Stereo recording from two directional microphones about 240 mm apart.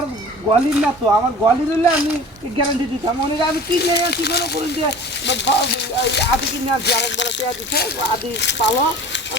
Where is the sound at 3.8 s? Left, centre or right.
Left.